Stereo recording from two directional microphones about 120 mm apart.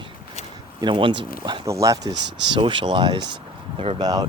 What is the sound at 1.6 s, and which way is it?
Speech, 25° right (ahead or behind).